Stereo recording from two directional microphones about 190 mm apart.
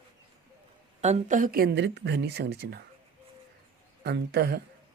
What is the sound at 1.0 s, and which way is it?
Speech, 40° right (ahead or behind).